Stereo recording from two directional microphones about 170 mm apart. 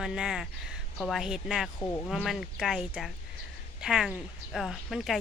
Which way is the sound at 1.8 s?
20° left (ahead or behind).